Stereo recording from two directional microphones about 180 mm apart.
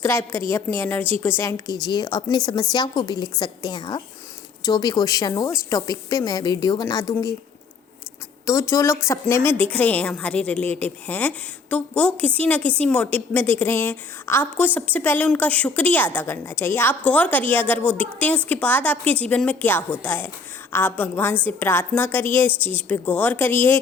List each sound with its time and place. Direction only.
0.0 s a woman's voice: 15° left (ahead or behind)
8.4 s a woman's voice: 15° left (ahead or behind)